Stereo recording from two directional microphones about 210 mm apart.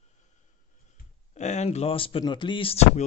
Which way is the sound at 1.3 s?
35° left (ahead or behind).